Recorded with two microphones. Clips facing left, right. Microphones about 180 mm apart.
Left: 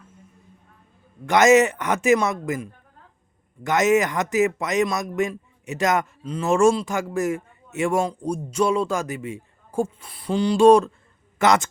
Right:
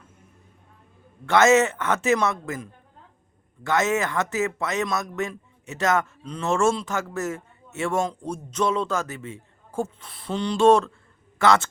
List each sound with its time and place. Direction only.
1.3 s speech: 15° left (ahead or behind)
6.2 s speech: 5° left (ahead or behind)
6.5 s a man's voice: 15° left (ahead or behind)